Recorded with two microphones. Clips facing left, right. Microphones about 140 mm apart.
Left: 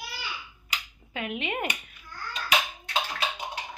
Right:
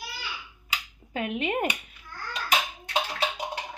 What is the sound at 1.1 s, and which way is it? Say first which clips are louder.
Speech: right 4 dB; 40° right (ahead or behind).